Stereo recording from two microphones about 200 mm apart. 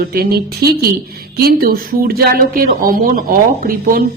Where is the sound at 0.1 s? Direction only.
50° right (ahead or behind).